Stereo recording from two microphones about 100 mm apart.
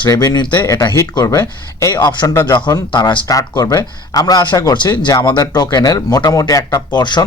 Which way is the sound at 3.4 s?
35° left (ahead or behind).